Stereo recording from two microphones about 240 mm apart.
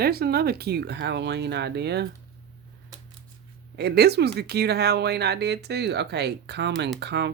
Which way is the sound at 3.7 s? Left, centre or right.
Right.